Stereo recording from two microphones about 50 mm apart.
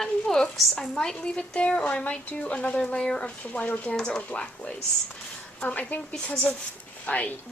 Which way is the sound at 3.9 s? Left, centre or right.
Centre.